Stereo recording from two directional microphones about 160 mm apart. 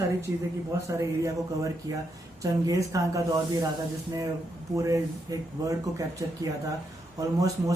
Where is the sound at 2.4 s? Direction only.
20° right (ahead or behind).